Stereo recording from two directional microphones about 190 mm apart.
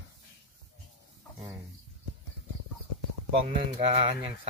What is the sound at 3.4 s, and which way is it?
Speech, 30° right (ahead or behind).